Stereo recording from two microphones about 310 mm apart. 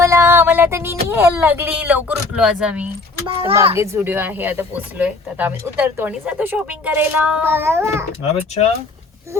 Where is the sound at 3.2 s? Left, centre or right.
Centre.